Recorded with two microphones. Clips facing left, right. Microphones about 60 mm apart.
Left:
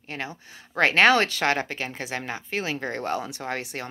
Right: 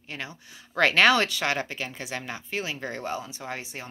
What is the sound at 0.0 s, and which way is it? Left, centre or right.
Speech, left.